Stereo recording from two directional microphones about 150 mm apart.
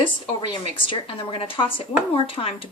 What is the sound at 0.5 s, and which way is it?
A woman's voice, 35° left (ahead or behind).